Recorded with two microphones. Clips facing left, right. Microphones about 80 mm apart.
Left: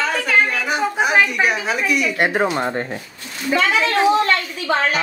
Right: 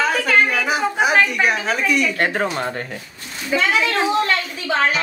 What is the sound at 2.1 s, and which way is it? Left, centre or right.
Speech, centre.